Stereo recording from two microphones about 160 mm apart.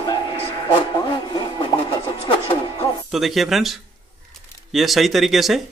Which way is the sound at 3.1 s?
Centre (ahead or behind).